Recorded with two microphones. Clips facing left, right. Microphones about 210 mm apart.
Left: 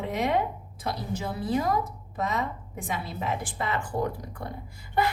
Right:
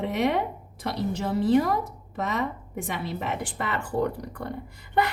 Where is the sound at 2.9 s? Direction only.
65° right (ahead or behind).